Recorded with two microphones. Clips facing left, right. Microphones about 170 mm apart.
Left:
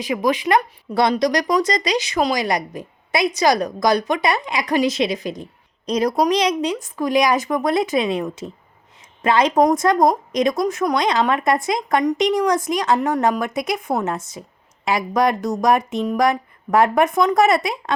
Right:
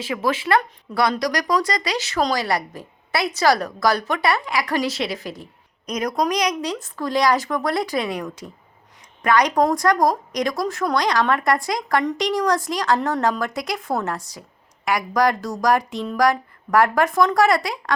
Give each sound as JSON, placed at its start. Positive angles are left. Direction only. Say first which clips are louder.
{"t": 0.0, "sound": "speech", "louder": "left 3 dB", "side_deg": 15}
{"t": 5.8, "sound": "a woman's voice", "louder": "left 4 dB", "side_deg": 30}